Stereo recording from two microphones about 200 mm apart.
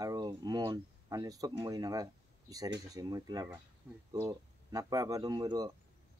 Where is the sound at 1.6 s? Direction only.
20° right (ahead or behind).